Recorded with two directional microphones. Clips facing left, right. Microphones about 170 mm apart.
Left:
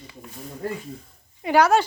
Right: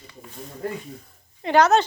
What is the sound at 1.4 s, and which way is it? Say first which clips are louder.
Speech: right 1 dB; 10° left (ahead or behind).